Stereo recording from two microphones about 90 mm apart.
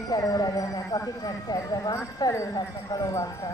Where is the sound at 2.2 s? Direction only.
45° left (ahead or behind).